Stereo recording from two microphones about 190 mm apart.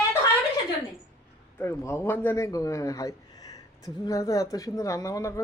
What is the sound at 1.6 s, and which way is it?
A man's voice, 15° left (ahead or behind).